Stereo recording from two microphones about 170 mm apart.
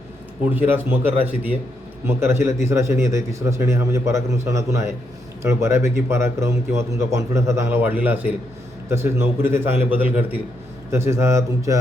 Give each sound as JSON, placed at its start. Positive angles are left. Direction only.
{"t": 0.5, "sound": "a man's voice", "side_deg": -10}